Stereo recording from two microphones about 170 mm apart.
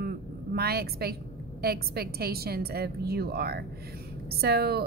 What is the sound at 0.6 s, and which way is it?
A woman's voice, 65° right (ahead or behind).